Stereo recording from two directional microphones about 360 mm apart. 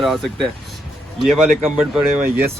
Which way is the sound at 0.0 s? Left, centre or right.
Centre.